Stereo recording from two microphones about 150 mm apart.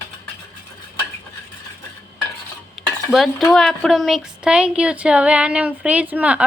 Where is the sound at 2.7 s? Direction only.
Centre (ahead or behind).